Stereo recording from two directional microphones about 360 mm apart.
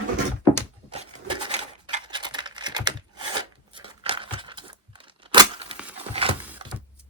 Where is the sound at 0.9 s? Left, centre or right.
Centre.